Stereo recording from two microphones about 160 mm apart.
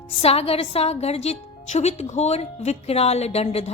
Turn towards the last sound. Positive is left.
turn(degrees=40)  # may be behind; listen again after turning